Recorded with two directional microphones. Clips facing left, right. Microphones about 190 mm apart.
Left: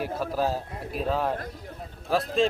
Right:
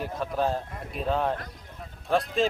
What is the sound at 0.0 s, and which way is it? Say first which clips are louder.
A man's voice: left 1 dB; 5° left (ahead or behind).